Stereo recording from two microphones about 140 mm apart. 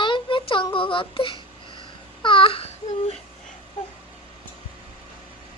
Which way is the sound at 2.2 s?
40° left (ahead or behind).